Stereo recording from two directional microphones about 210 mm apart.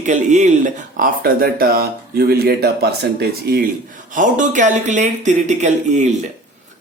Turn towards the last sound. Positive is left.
turn(degrees=-35)  # may be behind; listen again after turning